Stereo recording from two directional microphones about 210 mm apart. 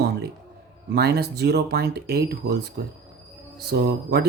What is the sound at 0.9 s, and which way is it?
Speech, 50° right (ahead or behind).